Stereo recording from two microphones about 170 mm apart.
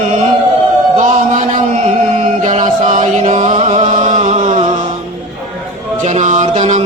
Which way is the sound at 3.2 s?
45° right (ahead or behind).